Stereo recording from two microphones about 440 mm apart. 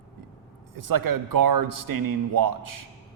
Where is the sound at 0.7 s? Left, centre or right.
Right.